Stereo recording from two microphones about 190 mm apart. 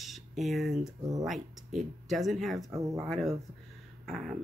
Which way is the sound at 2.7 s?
15° right (ahead or behind).